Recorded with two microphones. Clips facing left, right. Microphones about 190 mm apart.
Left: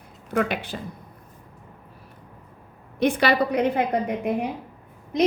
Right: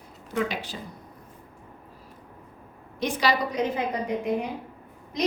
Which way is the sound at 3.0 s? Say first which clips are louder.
Left 5 dB; 60° left (ahead or behind).